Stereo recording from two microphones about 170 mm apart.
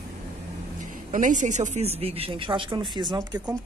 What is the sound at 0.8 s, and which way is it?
Speech, 50° right (ahead or behind).